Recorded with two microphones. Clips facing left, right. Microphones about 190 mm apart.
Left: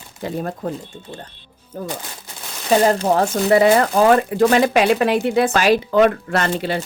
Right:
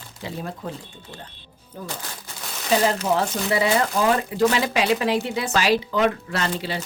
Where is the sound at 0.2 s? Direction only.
50° left (ahead or behind).